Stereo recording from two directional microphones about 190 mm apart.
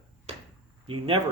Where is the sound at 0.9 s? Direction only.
30° right (ahead or behind).